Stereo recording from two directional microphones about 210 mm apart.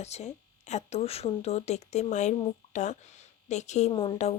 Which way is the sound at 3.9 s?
20° left (ahead or behind).